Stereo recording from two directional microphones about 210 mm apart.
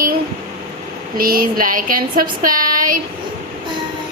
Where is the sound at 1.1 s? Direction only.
45° right (ahead or behind).